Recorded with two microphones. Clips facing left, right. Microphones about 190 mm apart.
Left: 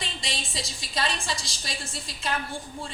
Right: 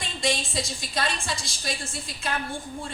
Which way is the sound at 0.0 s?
50° right (ahead or behind).